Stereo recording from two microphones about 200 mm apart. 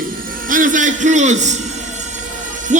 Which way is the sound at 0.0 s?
45° right (ahead or behind).